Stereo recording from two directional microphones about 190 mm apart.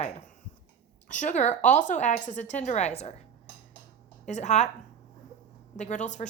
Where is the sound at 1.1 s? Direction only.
40° left (ahead or behind).